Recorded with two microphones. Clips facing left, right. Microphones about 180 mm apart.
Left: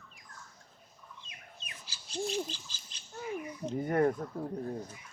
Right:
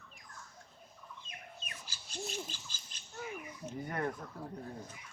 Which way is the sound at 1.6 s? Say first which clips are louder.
Right 1 dB; 50° right (ahead or behind).